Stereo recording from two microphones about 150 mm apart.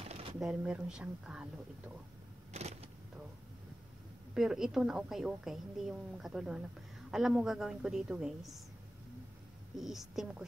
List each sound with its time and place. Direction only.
0.0 s a sound: 40° right (ahead or behind)
0.4 s speech: 5° right (ahead or behind)
2.5 s vehicle: 45° right (ahead or behind)
4.3 s a woman's voice: 5° right (ahead or behind)
9.8 s a woman's voice: centre (ahead or behind)